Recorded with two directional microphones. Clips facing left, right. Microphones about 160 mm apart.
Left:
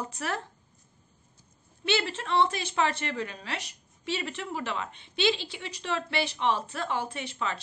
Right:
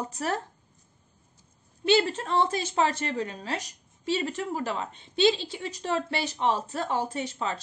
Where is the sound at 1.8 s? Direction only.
40° right (ahead or behind).